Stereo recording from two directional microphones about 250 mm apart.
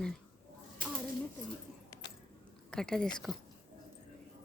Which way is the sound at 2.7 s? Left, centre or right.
Centre.